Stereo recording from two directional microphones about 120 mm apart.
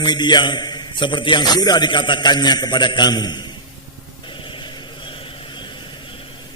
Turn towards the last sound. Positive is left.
turn(degrees=40)  # may be behind; listen again after turning